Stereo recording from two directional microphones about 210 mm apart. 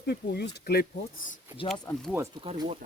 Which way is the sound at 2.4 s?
25° right (ahead or behind).